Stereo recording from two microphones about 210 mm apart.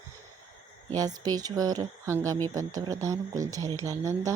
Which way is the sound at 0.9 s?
20° right (ahead or behind).